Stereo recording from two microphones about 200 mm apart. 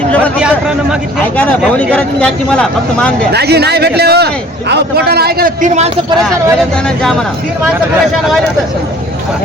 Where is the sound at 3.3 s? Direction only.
55° right (ahead or behind).